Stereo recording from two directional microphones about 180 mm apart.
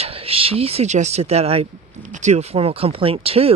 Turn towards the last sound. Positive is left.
turn(degrees=-35)  # may be behind; listen again after turning